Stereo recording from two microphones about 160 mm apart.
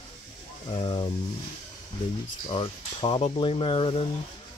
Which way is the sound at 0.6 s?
30° left (ahead or behind).